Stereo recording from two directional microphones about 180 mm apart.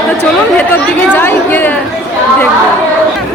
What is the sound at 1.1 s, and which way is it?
Speech, 10° left (ahead or behind).